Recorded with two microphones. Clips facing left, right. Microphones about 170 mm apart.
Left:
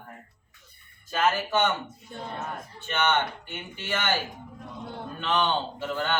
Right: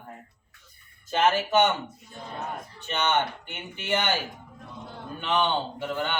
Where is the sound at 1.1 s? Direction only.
25° right (ahead or behind).